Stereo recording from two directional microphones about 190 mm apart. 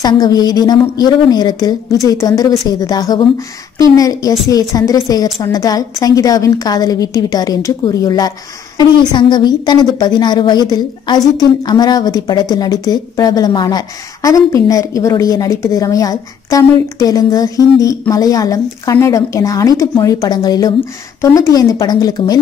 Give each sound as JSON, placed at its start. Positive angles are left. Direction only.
{"t": 0.0, "sound": "a woman's voice", "side_deg": 20}